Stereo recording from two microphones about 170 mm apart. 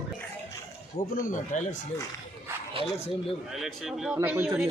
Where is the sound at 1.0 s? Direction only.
40° left (ahead or behind).